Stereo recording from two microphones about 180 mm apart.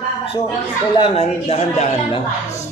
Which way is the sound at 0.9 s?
30° left (ahead or behind).